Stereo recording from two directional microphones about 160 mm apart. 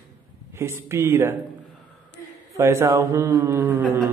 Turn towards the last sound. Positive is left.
turn(degrees=-15)  # may be behind; listen again after turning